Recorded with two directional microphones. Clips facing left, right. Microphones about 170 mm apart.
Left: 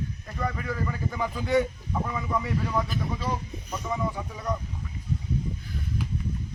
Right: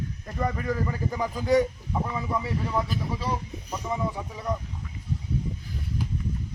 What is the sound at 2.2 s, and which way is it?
Speech, 30° right (ahead or behind).